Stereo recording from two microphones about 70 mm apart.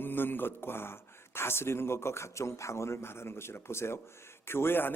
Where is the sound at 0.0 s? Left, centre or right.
Left.